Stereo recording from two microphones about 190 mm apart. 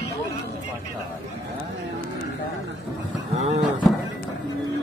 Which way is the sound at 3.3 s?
35° right (ahead or behind).